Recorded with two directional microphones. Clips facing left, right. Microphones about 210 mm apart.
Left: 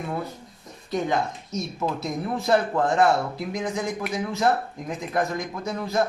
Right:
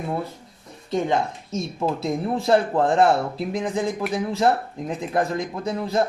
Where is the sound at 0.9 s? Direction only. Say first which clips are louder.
Right 2 dB; 25° right (ahead or behind).